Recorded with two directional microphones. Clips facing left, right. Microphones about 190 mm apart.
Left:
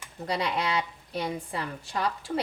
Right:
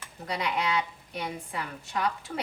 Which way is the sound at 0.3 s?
35° left (ahead or behind).